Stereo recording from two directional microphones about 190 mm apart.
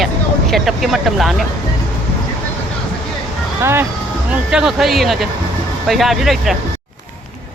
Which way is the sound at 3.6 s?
10° right (ahead or behind).